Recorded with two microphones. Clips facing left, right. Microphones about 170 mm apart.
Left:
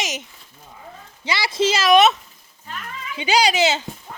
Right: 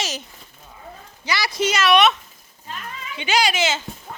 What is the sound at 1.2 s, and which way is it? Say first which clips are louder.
Speech: left 2 dB; 25° left (ahead or behind).